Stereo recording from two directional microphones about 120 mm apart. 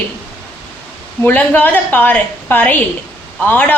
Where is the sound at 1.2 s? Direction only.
15° left (ahead or behind).